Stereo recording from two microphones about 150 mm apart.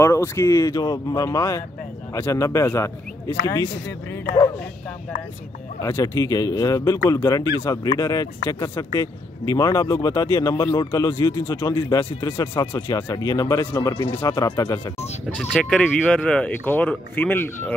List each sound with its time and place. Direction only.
0.0 s speech: 15° left (ahead or behind)
5.8 s speech: 20° left (ahead or behind)
15.3 s speech: 5° left (ahead or behind)